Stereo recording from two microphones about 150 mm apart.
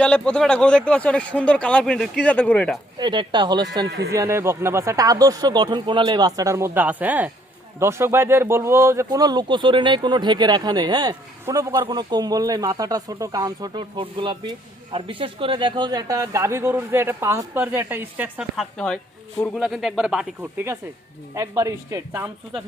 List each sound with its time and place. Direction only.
0.0 s speech: 5° left (ahead or behind)
3.0 s speech: 30° right (ahead or behind); by 20.7 s 10° right (ahead or behind)
21.3 s speech: 20° right (ahead or behind)